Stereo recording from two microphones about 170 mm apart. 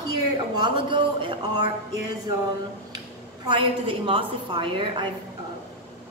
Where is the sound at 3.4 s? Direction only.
30° right (ahead or behind).